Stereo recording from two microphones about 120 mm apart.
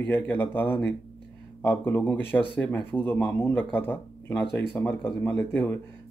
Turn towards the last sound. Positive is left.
turn(degrees=15)  # may be behind; listen again after turning